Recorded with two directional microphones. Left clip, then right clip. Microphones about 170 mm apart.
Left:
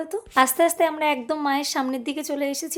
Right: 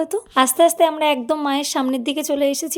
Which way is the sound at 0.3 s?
25° right (ahead or behind).